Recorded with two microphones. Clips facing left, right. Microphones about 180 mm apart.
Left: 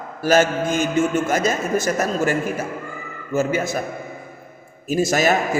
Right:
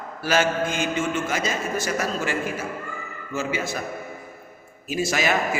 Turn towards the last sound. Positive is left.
turn(degrees=45)  # may be behind; listen again after turning